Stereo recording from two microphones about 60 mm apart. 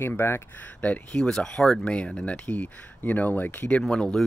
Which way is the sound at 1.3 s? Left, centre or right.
Centre.